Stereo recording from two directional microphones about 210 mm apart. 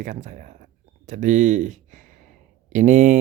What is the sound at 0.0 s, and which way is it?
Speech, 35° right (ahead or behind).